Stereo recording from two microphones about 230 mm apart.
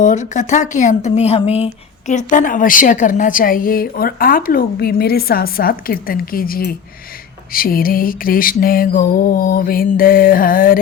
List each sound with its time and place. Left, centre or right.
0.0 s speech: left